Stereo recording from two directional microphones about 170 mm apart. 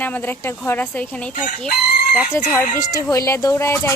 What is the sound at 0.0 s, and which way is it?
Speech, 10° left (ahead or behind).